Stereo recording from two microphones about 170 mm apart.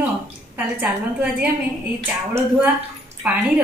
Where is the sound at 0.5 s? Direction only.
10° right (ahead or behind).